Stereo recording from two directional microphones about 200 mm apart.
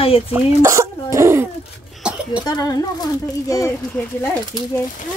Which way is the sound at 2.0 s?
5° right (ahead or behind).